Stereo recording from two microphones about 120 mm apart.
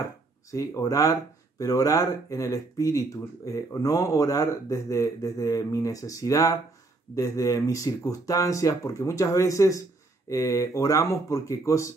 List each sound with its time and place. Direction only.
0.5 s speech: 25° left (ahead or behind)